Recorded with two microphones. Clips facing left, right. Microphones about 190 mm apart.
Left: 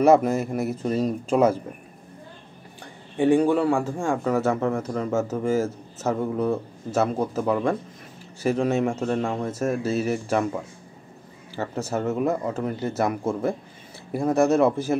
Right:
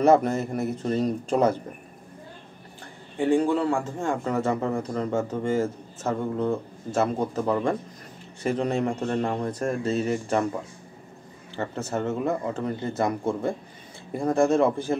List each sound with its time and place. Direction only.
0.0 s a man's voice: 5° left (ahead or behind)
3.2 s a man's voice: 15° left (ahead or behind)
11.5 s a man's voice: 5° left (ahead or behind)